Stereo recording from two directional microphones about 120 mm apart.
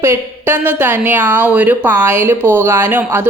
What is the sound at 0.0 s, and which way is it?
Speech, 20° right (ahead or behind).